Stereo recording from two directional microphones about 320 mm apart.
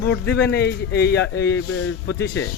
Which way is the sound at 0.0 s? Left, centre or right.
Left.